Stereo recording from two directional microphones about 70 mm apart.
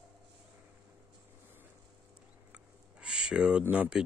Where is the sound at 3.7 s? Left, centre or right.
Centre.